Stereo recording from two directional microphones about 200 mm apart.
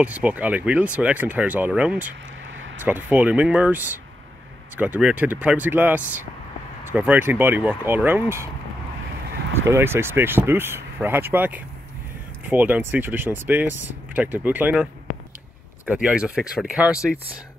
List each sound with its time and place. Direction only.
0.0 s speech: 5° right (ahead or behind)
9.7 s speech: 10° right (ahead or behind)
15.9 s speech: 5° right (ahead or behind)